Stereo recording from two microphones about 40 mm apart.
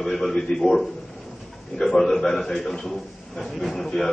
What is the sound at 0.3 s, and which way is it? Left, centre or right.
A man's voice, centre.